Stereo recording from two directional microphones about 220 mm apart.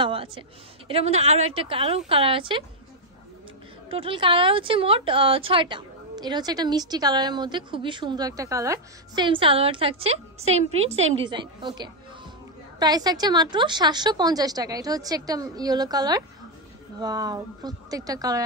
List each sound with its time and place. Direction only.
0.0 s speech: 25° right (ahead or behind)
3.9 s a woman's voice: 25° right (ahead or behind)